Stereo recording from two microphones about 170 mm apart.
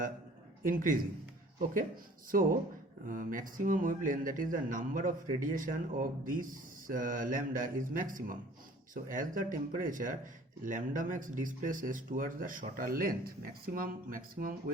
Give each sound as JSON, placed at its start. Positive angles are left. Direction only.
{"t": 0.6, "sound": "speech", "side_deg": -55}
{"t": 2.3, "sound": "speech", "side_deg": -55}